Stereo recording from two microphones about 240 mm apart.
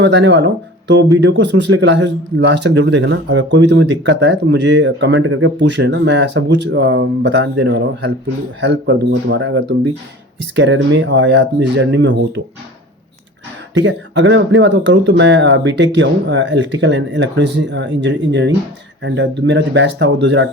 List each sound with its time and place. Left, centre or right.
0.0 s a man's voice: right
13.7 s a man's voice: right